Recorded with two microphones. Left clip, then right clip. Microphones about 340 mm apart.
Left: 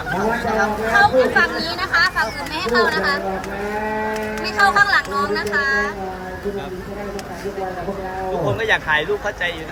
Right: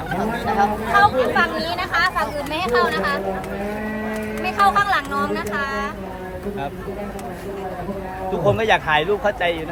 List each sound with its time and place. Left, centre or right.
0.9 s speech: right
4.5 s speech: right
8.4 s speech: right